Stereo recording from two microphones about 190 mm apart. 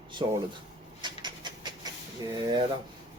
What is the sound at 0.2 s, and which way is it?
Speech, 25° right (ahead or behind).